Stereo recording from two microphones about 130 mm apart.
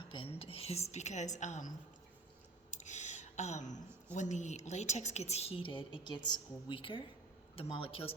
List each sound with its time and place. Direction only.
0.1 s speech: 45° left (ahead or behind); by 1.7 s 65° left (ahead or behind)
2.6 s a sound: 65° left (ahead or behind)
4.1 s a woman's voice: 65° left (ahead or behind); by 8.1 s 45° left (ahead or behind)